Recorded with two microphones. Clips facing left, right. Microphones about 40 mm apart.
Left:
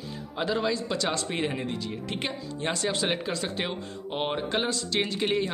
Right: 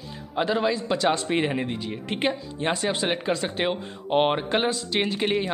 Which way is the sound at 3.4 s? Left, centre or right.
Right.